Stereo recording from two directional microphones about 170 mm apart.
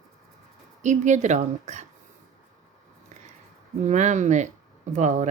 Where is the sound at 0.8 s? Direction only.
45° right (ahead or behind).